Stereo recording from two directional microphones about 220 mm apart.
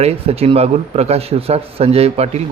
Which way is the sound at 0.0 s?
25° right (ahead or behind).